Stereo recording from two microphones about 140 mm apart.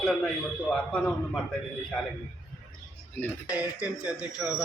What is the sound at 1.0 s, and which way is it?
Speech, centre (ahead or behind).